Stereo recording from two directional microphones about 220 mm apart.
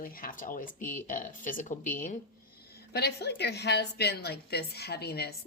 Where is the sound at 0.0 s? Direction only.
40° left (ahead or behind).